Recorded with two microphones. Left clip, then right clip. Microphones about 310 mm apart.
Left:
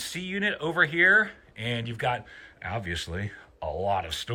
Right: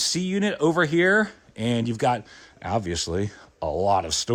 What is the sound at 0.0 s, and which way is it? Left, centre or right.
Speech, centre.